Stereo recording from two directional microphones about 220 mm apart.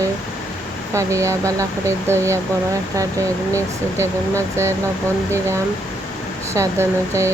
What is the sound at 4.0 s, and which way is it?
Speech, 10° right (ahead or behind).